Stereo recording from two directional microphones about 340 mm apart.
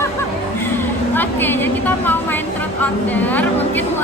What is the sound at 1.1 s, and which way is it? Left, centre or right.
A woman's voice, centre.